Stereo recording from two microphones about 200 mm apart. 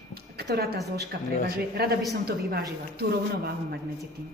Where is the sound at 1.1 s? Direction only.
50° right (ahead or behind).